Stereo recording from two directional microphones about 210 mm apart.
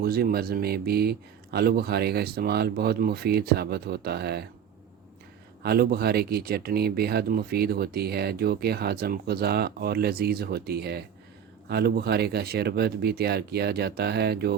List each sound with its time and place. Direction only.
0.0 s speech: 45° right (ahead or behind)
5.6 s speech: 45° right (ahead or behind)